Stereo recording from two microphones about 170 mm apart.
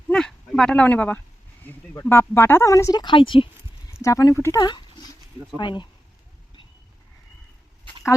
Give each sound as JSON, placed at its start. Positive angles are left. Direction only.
{"t": 0.1, "sound": "speech", "side_deg": 5}
{"t": 3.9, "sound": "speech", "side_deg": 20}